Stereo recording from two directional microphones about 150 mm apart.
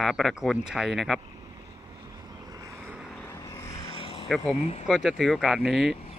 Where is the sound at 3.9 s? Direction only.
40° left (ahead or behind).